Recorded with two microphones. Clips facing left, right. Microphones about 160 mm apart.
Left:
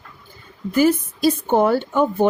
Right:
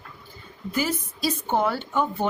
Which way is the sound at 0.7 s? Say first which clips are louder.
Left 10 dB; 50° left (ahead or behind).